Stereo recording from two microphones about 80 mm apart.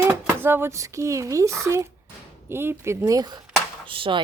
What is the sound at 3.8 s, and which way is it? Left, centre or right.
Speech, right.